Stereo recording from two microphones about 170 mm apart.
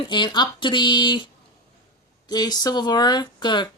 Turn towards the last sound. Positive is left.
turn(degrees=25)  # may be behind; listen again after turning